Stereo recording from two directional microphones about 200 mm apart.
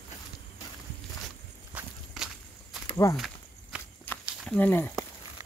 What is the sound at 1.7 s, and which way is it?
Walk, 5° right (ahead or behind).